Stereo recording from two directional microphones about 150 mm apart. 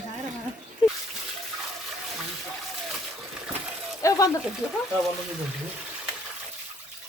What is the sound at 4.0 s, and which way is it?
Speech, 20° left (ahead or behind).